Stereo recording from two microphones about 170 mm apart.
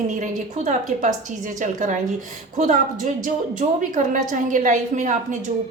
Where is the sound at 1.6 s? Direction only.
50° right (ahead or behind).